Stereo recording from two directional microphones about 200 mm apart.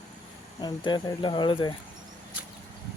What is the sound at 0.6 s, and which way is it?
Speech, 20° left (ahead or behind).